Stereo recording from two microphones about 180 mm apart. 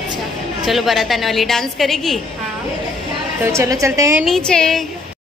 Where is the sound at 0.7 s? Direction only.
Centre (ahead or behind).